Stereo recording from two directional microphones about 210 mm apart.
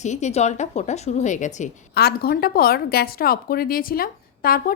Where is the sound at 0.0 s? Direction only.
35° left (ahead or behind).